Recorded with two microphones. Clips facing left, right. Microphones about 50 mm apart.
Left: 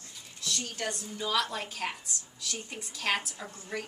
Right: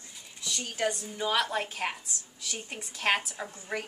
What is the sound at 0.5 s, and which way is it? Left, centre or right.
A woman's voice, centre.